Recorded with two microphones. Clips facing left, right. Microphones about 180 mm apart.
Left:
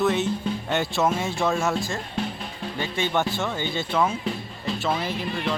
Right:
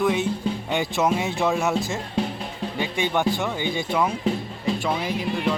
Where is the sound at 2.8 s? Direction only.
15° right (ahead or behind).